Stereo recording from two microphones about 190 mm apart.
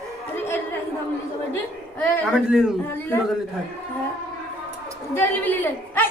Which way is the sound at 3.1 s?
10° left (ahead or behind).